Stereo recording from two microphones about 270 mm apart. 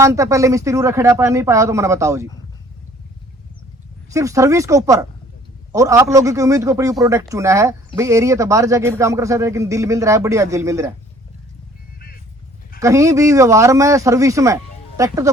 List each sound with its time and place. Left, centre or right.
0.0 s speech: centre
4.1 s speech: centre
11.9 s a sound: left
12.8 s speech: centre